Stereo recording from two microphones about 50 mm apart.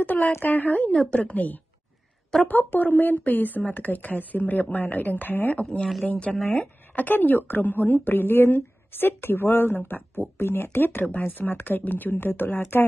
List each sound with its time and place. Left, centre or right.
0.0 s speech: left
5.6 s speech: left
6.3 s speech: centre
7.0 s a woman's voice: left